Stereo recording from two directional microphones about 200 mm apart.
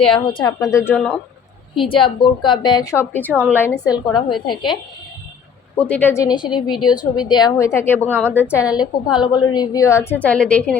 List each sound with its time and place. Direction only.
0.0 s a woman's voice: 25° left (ahead or behind); by 1.2 s 10° left (ahead or behind)
1.9 s a woman's voice: 25° left (ahead or behind)
5.7 s a woman's voice: 5° left (ahead or behind); by 6.6 s 20° left (ahead or behind)
6.7 s a woman's voice: 5° right (ahead or behind)
7.3 s a woman's voice: 20° left (ahead or behind); by 10.8 s 5° left (ahead or behind)